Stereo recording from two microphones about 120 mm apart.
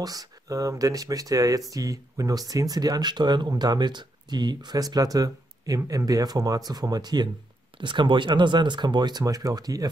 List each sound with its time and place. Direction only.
0.0 s speech: 30° right (ahead or behind)